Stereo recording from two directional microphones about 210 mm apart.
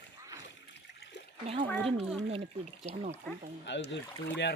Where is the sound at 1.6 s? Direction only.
5° left (ahead or behind).